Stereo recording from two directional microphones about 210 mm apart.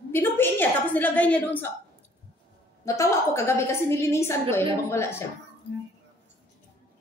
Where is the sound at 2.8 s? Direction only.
15° left (ahead or behind).